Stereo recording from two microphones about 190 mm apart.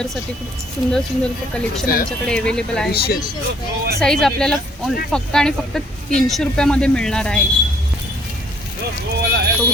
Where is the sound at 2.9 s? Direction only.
55° left (ahead or behind).